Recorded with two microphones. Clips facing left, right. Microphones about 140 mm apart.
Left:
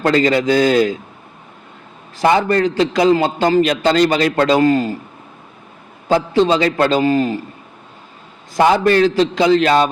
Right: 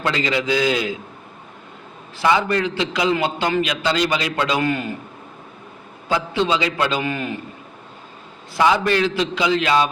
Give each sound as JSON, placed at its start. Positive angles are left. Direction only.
{"t": 0.0, "sound": "a man's voice", "side_deg": 45}
{"t": 2.1, "sound": "a man's voice", "side_deg": 45}
{"t": 6.1, "sound": "a man's voice", "side_deg": 45}
{"t": 8.5, "sound": "a man's voice", "side_deg": 45}